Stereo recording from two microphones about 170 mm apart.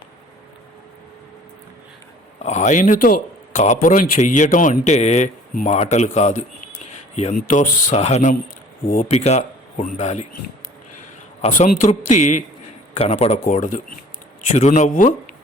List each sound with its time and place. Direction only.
2.4 s speech: 45° left (ahead or behind)
11.4 s speech: 45° left (ahead or behind)